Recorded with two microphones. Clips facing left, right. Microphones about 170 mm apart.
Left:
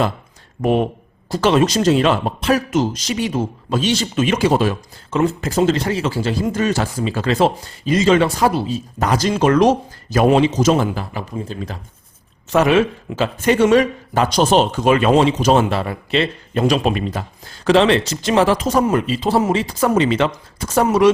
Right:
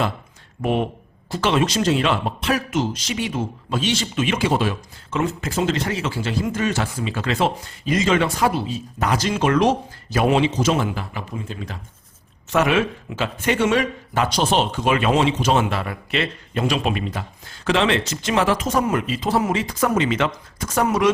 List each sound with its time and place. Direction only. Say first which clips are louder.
0.6 s speech: left 5 dB; 40° left (ahead or behind)